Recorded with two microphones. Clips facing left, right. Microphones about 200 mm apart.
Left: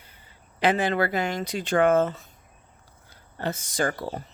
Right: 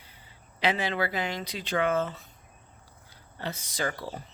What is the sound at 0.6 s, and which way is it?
Speech, 50° left (ahead or behind).